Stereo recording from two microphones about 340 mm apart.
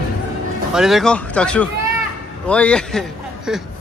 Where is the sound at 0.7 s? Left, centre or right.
Centre.